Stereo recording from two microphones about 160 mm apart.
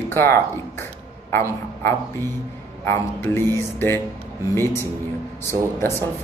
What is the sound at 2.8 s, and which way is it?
Speech, 15° left (ahead or behind).